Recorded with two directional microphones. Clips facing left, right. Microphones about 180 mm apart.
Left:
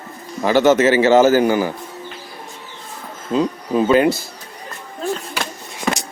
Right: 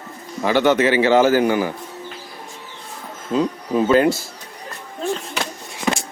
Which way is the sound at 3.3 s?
20° left (ahead or behind).